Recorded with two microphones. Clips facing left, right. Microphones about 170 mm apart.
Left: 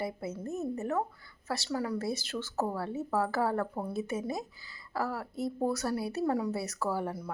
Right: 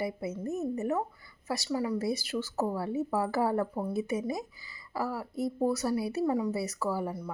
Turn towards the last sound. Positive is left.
turn(degrees=-5)  # may be behind; listen again after turning